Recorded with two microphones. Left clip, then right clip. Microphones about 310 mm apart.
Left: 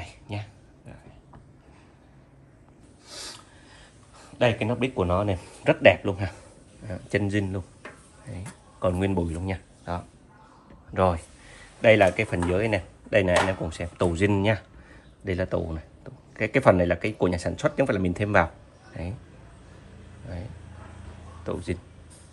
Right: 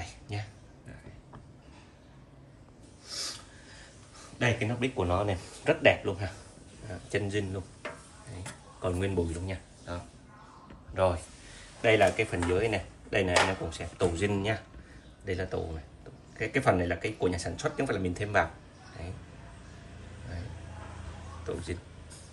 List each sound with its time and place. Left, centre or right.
3.1 s a sound: centre
4.4 s speech: centre
8.8 s a man's voice: centre